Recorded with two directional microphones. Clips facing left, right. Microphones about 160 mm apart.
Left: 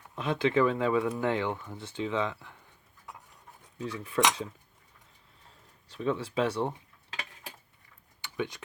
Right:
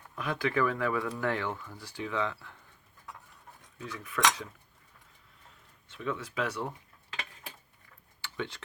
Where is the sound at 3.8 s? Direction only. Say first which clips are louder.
Left 6 dB; 30° left (ahead or behind).